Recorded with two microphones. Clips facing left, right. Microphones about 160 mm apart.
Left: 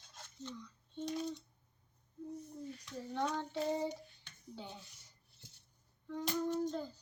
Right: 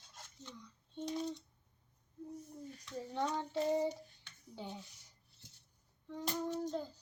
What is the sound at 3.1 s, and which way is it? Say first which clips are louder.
Child singing: even; 10° right (ahead or behind).